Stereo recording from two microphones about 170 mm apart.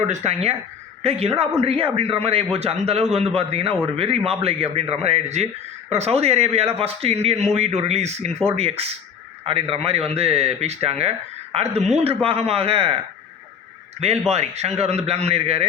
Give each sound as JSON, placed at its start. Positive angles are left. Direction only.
{"t": 0.1, "sound": "a man's voice", "side_deg": -40}